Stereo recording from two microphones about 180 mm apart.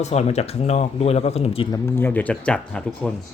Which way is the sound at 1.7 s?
10° left (ahead or behind).